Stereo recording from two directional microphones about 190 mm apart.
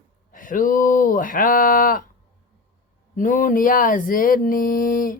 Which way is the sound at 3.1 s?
45° left (ahead or behind).